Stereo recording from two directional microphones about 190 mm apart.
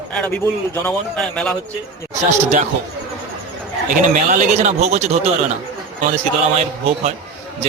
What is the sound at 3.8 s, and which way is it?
A man's voice, 40° right (ahead or behind).